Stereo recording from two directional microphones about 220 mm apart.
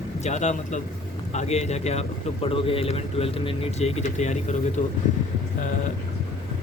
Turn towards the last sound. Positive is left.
turn(degrees=35)  # may be behind; listen again after turning